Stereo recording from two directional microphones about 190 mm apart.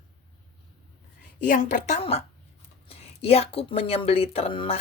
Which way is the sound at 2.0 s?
30° left (ahead or behind).